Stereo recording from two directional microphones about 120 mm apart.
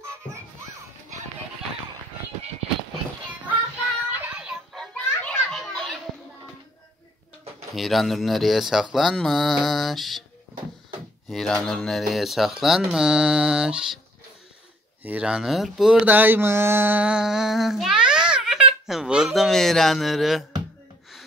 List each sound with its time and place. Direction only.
0.0 s children playing: 25° right (ahead or behind)
4.2 s music: 10° right (ahead or behind)
4.7 s children playing: 5° left (ahead or behind)
7.7 s speech: centre (ahead or behind)
11.2 s speech: 5° left (ahead or behind)
15.0 s speech: 10° right (ahead or behind)
16.1 s child singing: 15° right (ahead or behind)